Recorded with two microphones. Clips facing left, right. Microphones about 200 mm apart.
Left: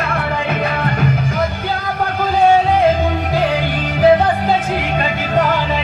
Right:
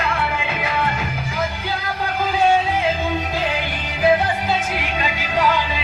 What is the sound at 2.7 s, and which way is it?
Music, 55° left (ahead or behind).